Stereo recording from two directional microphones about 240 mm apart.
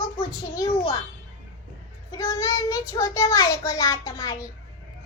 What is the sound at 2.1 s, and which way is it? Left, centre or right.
A child's voice, centre.